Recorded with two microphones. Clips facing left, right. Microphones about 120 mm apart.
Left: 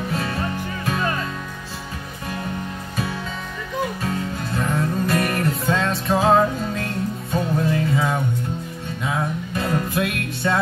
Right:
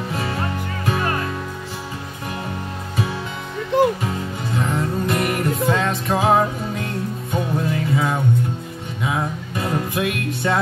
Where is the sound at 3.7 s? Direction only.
90° right.